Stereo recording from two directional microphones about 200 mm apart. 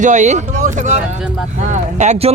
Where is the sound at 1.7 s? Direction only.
35° right (ahead or behind).